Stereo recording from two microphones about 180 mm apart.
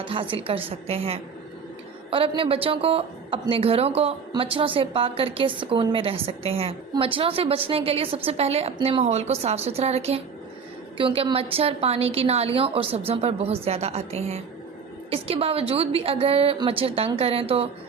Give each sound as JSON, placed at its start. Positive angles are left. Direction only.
{"t": 0.1, "sound": "a woman's voice", "side_deg": -30}